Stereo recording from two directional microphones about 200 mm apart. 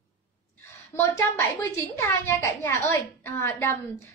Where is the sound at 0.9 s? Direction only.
15° left (ahead or behind).